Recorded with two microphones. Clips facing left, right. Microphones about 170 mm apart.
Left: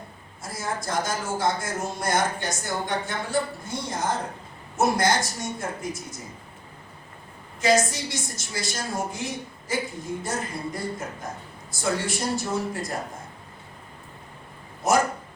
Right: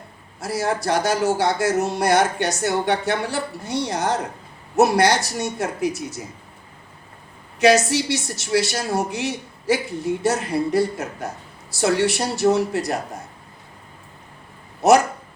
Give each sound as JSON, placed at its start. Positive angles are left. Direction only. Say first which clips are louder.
{"t": 0.3, "sound": "a man's voice", "louder": "right 8 dB", "side_deg": -75}
{"t": 7.6, "sound": "a man's voice", "louder": "right 6 dB", "side_deg": -75}
{"t": 14.8, "sound": "speech", "louder": "right 7 dB", "side_deg": -75}